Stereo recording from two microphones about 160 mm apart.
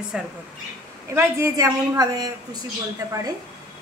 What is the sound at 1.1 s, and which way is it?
A woman's voice, 20° right (ahead or behind).